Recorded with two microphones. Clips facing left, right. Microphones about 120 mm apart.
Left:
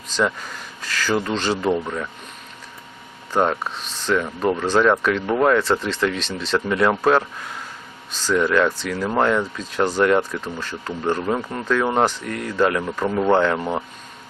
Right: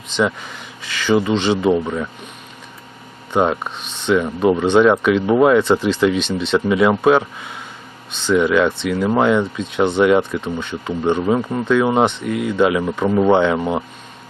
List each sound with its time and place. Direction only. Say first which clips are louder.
0.2 s speech: right 3 dB; centre (ahead or behind)
3.3 s speech: right 3 dB; 5° right (ahead or behind)